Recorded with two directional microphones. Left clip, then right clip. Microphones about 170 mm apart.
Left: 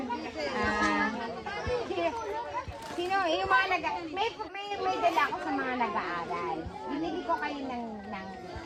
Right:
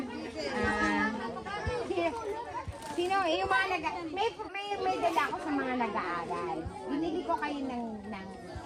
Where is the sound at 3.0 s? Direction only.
15° right (ahead or behind).